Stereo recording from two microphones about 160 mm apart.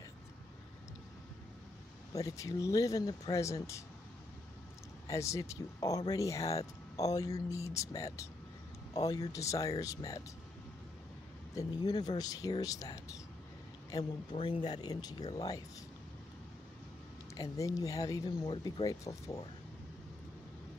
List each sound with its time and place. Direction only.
2.1 s speech: 20° left (ahead or behind)
5.0 s speech: 20° left (ahead or behind)
11.5 s speech: 25° left (ahead or behind)
14.3 s speech: 35° left (ahead or behind)
17.4 s speech: 20° left (ahead or behind)